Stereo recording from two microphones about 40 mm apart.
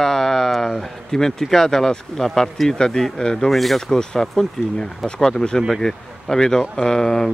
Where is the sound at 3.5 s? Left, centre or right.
Centre.